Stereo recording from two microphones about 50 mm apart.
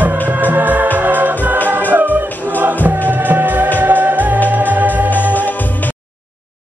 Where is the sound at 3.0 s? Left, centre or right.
Right.